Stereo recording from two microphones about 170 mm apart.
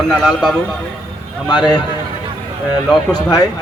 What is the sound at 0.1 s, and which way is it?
Speech, centre (ahead or behind).